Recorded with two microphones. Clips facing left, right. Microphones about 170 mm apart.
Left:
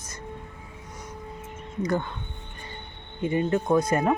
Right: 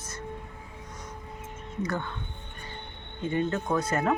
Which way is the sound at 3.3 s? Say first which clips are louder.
Left 4 dB; 15° left (ahead or behind).